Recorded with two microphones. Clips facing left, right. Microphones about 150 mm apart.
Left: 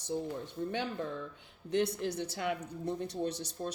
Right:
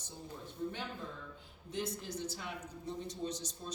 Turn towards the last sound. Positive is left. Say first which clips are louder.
# left 5 dB
turn(degrees=60)  # may be behind; listen again after turning